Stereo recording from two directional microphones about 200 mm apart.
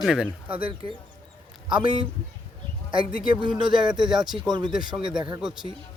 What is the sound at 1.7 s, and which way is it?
Speech, 25° right (ahead or behind).